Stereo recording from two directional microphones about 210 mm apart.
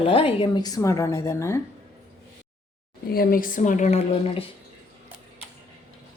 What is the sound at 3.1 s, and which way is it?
A woman's voice, 40° left (ahead or behind).